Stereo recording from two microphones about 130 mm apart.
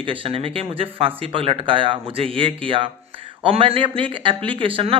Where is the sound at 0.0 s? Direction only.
45° right (ahead or behind).